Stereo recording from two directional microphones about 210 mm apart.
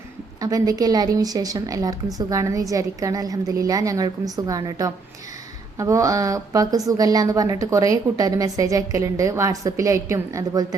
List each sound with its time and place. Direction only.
0.3 s a woman's voice: 15° right (ahead or behind)